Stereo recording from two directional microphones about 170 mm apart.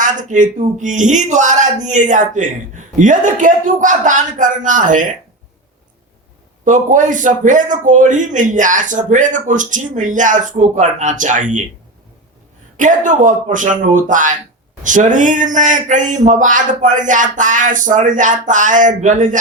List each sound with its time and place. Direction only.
0.0 s speech: 45° right (ahead or behind)
6.7 s speech: 50° right (ahead or behind)
12.7 s speech: 50° right (ahead or behind)